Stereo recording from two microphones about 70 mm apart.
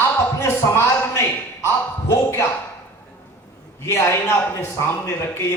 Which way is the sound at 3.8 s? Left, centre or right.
Left.